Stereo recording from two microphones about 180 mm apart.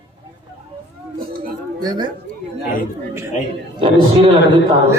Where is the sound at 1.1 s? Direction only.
55° right (ahead or behind).